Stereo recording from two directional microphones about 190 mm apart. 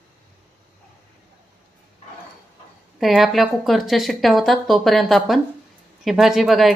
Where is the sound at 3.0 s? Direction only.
Centre (ahead or behind).